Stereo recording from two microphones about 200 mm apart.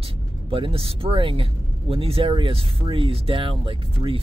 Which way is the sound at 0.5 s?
25° right (ahead or behind).